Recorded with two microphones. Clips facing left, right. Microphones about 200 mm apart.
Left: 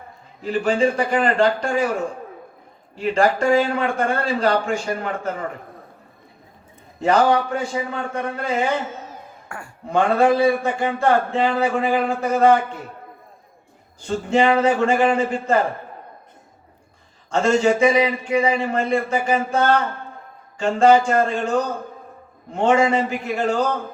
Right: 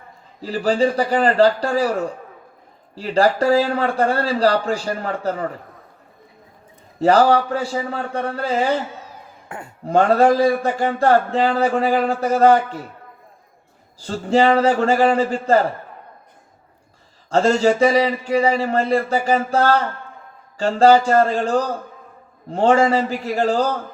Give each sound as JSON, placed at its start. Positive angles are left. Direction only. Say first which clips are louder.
{"t": 0.4, "sound": "speech", "louder": "right 1 dB", "side_deg": -35}
{"t": 7.0, "sound": "speech", "louder": "right 3 dB", "side_deg": -35}
{"t": 9.5, "sound": "speech", "louder": "right 3 dB", "side_deg": -20}
{"t": 9.8, "sound": "speech", "louder": "right 3 dB", "side_deg": -35}
{"t": 14.0, "sound": "speech", "louder": "right 2 dB", "side_deg": -35}
{"t": 17.3, "sound": "speech", "louder": "right 2 dB", "side_deg": -35}